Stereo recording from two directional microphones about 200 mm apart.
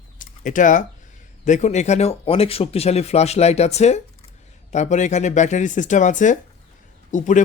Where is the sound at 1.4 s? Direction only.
35° left (ahead or behind).